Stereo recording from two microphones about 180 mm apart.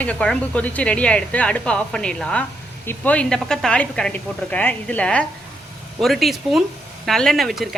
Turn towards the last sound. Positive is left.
turn(degrees=0)  # may be behind; listen again after turning